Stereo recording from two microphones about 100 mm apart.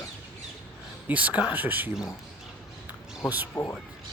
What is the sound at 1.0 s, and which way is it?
Speech, 15° right (ahead or behind).